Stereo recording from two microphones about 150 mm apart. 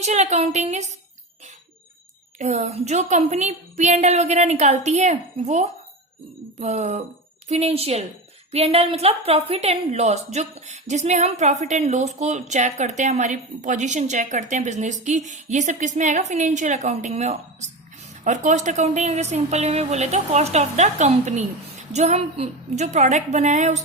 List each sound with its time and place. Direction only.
0.0 s a woman's voice: 50° right (ahead or behind)
2.4 s a woman's voice: 50° right (ahead or behind)